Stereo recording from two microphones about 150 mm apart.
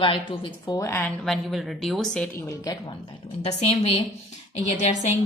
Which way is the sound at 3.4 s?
45° left (ahead or behind).